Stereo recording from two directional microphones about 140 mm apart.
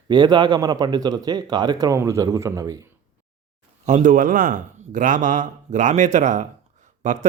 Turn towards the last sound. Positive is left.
turn(degrees=-60)  # may be behind; listen again after turning